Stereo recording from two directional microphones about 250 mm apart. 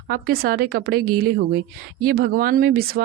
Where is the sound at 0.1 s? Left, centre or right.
Right.